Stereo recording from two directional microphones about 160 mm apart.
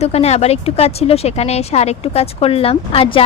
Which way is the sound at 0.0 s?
40° left (ahead or behind).